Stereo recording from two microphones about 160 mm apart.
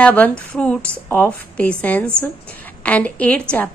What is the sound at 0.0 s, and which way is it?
A woman's voice, 5° left (ahead or behind).